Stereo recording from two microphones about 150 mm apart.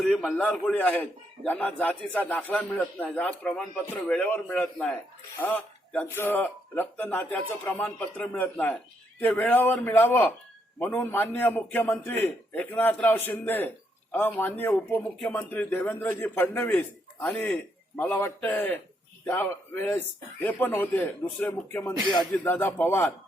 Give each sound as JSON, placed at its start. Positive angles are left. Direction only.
{"t": 0.0, "sound": "a man's voice", "side_deg": 5}